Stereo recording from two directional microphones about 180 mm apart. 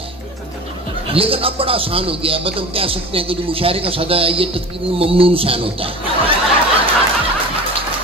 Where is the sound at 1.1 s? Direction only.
30° right (ahead or behind).